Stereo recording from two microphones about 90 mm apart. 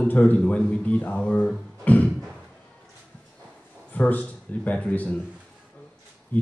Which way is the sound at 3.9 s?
15° left (ahead or behind).